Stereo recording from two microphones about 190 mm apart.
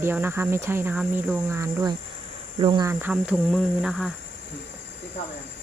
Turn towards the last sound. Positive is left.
turn(degrees=0)  # may be behind; listen again after turning